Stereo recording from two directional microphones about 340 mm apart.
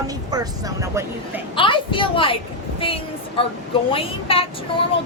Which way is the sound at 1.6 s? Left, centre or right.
Centre.